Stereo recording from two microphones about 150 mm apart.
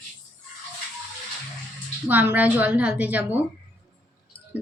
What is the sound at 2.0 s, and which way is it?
A woman's voice, 10° right (ahead or behind).